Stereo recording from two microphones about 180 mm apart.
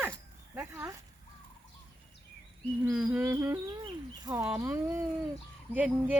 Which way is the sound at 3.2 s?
15° right (ahead or behind).